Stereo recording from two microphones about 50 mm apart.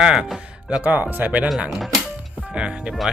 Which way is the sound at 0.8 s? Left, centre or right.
Right.